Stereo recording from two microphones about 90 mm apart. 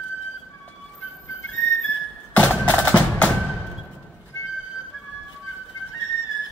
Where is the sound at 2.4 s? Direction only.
15° left (ahead or behind).